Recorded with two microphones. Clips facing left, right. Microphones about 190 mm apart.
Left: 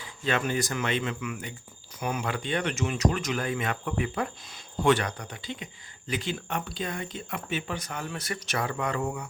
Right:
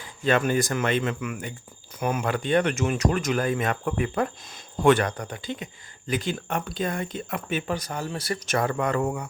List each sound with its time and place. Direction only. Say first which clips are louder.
0.3 s speech: right 5 dB; 50° right (ahead or behind)
7.8 s speech: right 4 dB; 35° right (ahead or behind)
8.4 s speech: right 5 dB; 45° right (ahead or behind)